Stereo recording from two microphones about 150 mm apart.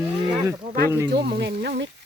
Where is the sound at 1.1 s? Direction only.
90° right.